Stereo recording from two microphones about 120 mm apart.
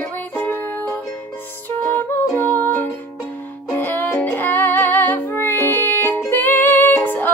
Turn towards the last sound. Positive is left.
turn(degrees=15)  # may be behind; listen again after turning